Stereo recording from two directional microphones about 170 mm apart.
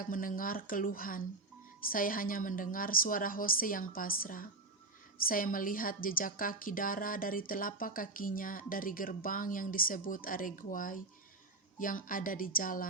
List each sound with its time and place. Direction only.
0.0 s a woman's voice: 55° left (ahead or behind)